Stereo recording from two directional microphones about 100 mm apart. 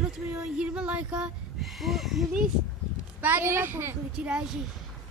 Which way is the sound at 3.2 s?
20° right (ahead or behind).